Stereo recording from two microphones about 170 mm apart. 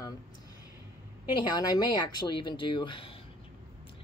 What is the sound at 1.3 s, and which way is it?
Speech, 25° left (ahead or behind).